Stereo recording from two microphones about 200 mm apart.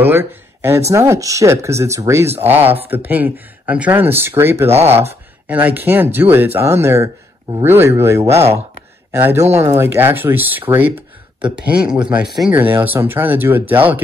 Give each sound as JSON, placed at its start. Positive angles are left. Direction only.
{"t": 0.0, "sound": "speech", "side_deg": -10}
{"t": 9.4, "sound": "speech", "side_deg": -35}
{"t": 9.9, "sound": "speech", "side_deg": -10}